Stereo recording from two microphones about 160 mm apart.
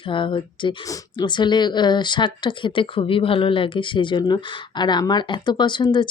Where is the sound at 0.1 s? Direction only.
30° left (ahead or behind).